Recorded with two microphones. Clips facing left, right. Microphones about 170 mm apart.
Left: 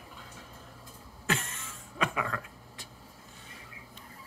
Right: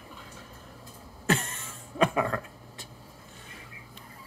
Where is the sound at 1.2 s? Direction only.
40° right (ahead or behind).